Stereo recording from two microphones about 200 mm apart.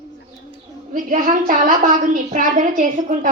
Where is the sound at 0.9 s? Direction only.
40° right (ahead or behind).